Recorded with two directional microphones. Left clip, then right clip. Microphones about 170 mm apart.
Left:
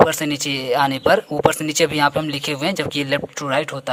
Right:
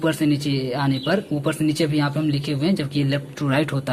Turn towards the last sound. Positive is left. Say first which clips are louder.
# left 2 dB
turn(degrees=30)  # may be behind; listen again after turning